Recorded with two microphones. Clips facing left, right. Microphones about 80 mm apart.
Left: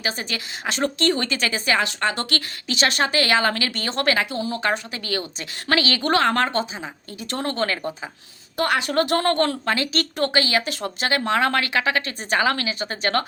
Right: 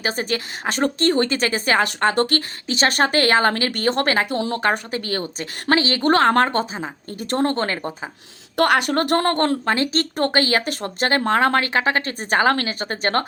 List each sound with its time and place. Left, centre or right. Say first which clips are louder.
0.0 s speech: right 5 dB; right
4.3 s speech: right 3 dB; right
4.6 s speech: right 3 dB; right
8.5 s a woman's voice: right 5 dB; right
8.9 s speech: right 1 dB; right